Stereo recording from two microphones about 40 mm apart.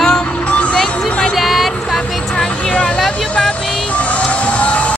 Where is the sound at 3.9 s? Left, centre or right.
Left.